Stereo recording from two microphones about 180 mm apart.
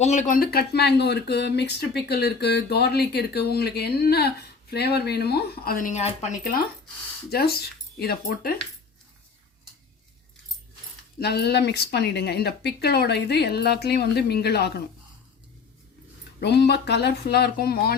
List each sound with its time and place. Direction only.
0.0 s speech: 40° left (ahead or behind)
7.3 s speech: 60° left (ahead or behind)
11.2 s speech: 65° left (ahead or behind)
16.4 s speech: 65° left (ahead or behind)